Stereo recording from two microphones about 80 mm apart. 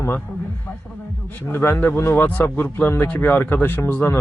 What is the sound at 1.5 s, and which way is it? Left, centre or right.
Speech, left.